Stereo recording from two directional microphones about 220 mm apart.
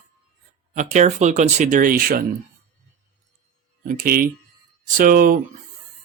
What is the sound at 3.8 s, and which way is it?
Speech, 40° right (ahead or behind).